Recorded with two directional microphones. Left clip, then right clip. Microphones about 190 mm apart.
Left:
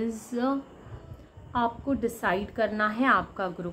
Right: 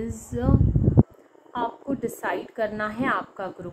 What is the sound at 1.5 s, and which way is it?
A woman's voice, 5° left (ahead or behind).